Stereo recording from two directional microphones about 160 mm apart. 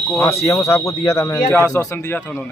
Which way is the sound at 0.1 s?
20° left (ahead or behind).